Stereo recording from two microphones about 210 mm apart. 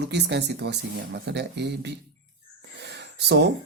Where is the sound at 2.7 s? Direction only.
55° right (ahead or behind).